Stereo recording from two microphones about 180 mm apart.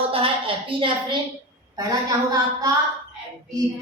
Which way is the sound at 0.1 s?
30° right (ahead or behind).